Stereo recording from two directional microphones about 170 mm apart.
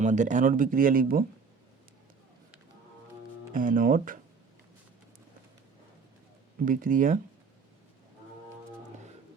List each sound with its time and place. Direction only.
0.0 s speech: 45° right (ahead or behind)
3.5 s speech: 55° right (ahead or behind)
6.7 s speech: 50° right (ahead or behind)